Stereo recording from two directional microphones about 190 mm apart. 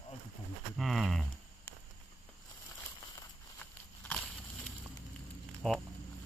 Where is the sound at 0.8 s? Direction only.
Centre (ahead or behind).